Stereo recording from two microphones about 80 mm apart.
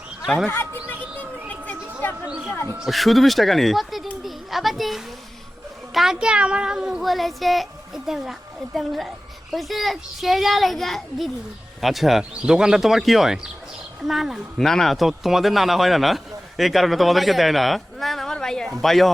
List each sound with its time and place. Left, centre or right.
0.5 s a woman's voice: left
1.5 s a sound: left
2.2 s speech: centre
2.7 s speech: centre
4.2 s a sound: centre
5.9 s speech: centre